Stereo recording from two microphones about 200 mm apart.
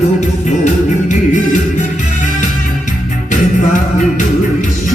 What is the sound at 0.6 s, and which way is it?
Music, 40° left (ahead or behind).